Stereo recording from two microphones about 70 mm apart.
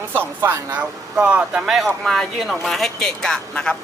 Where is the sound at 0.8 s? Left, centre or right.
Centre.